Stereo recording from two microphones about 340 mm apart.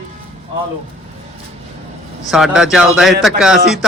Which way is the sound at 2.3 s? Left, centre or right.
Centre.